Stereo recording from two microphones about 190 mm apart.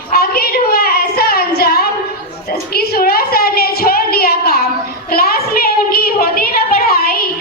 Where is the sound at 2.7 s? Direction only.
55° left (ahead or behind).